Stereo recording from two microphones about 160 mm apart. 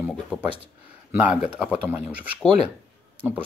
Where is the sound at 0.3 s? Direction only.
5° left (ahead or behind).